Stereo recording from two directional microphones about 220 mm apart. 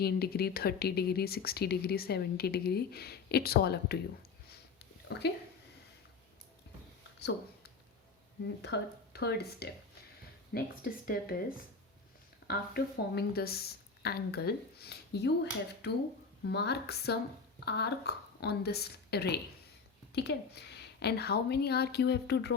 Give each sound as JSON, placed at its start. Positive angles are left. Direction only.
{"t": 0.0, "sound": "speech", "side_deg": 45}
{"t": 7.2, "sound": "a sound", "side_deg": 50}
{"t": 8.4, "sound": "speech", "side_deg": 50}
{"t": 12.5, "sound": "speech", "side_deg": 45}
{"t": 16.4, "sound": "speech", "side_deg": 50}